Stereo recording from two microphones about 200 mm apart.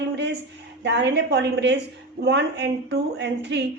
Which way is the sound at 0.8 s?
60° right (ahead or behind).